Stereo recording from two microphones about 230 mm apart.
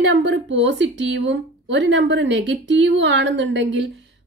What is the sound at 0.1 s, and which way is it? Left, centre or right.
Speech, right.